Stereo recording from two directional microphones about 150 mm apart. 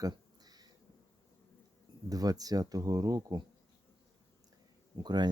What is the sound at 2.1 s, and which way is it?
Speech, 25° right (ahead or behind).